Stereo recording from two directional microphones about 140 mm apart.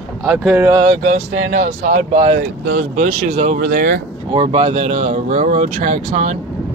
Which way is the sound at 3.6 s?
90° right.